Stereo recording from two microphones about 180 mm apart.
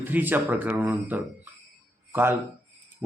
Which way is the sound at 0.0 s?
10° right (ahead or behind).